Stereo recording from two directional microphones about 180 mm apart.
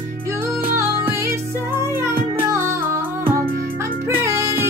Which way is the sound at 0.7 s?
15° right (ahead or behind).